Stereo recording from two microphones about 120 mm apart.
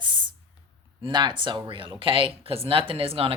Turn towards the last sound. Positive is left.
turn(degrees=-50)  # may be behind; listen again after turning